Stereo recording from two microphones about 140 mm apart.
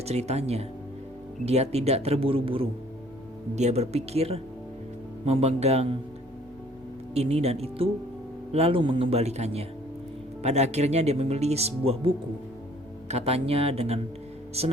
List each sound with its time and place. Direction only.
0.0 s speech: 50° right (ahead or behind)
3.5 s speech: 55° right (ahead or behind)
7.1 s speech: 50° right (ahead or behind)